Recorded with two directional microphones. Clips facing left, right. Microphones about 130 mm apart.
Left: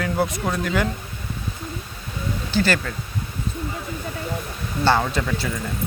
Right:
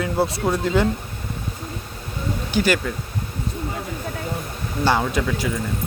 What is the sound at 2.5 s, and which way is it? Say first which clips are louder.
Speech: right 1 dB; 15° right (ahead or behind).